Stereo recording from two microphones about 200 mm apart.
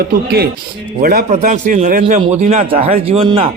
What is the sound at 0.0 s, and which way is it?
Speech, 50° right (ahead or behind).